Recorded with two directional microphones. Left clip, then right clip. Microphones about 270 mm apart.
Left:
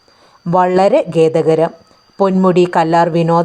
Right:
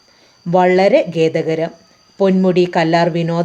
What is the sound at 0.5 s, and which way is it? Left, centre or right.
Speech, centre.